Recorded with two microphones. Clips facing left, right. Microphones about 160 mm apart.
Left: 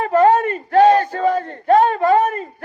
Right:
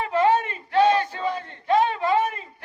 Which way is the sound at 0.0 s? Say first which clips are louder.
Left 7 dB; 50° left (ahead or behind).